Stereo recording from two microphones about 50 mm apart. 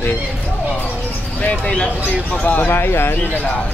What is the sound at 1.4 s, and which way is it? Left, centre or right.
Speech, left.